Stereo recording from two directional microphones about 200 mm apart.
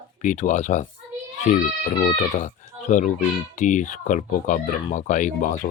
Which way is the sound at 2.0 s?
35° left (ahead or behind).